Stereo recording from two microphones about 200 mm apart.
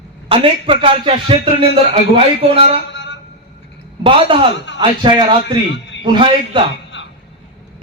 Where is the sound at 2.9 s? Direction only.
65° left (ahead or behind).